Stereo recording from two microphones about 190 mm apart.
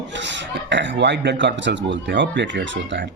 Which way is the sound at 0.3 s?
70° right (ahead or behind).